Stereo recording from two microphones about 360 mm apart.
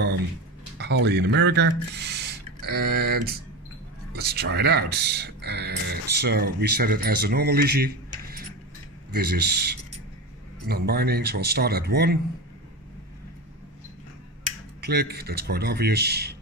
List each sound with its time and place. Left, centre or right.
0.7 s speech: right
9.1 s speech: right
14.9 s speech: right